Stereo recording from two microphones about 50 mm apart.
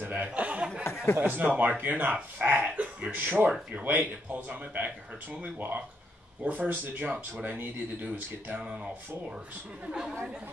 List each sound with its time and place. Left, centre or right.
0.0 s speech: right
0.3 s speech: right
0.9 s speech: left
1.2 s speech: right
8.6 s speech: right